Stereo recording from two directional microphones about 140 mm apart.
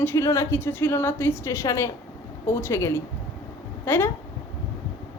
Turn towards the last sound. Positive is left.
turn(degrees=15)  # may be behind; listen again after turning